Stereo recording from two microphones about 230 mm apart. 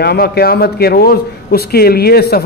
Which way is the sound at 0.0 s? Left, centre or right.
Left.